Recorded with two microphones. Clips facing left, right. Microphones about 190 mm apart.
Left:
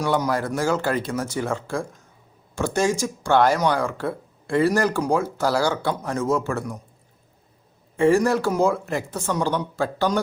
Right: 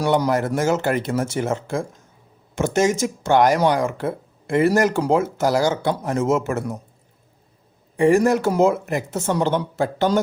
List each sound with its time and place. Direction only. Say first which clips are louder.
0.0 s speech: right 3 dB; 25° right (ahead or behind)
7.9 s speech: right 2 dB; 15° right (ahead or behind)